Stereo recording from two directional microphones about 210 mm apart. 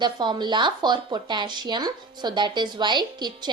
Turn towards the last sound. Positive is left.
turn(degrees=-20)  # may be behind; listen again after turning